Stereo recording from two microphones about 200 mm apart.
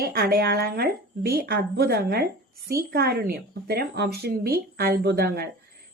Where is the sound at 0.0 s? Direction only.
50° right (ahead or behind).